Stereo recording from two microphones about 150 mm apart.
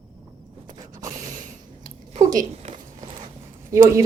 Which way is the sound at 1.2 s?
60° right (ahead or behind).